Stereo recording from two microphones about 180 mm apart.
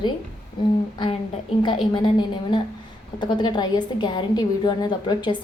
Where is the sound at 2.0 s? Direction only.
25° left (ahead or behind).